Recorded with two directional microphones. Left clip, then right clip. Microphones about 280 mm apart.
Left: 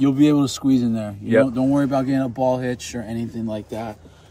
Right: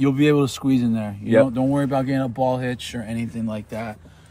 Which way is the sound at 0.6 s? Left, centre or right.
Right.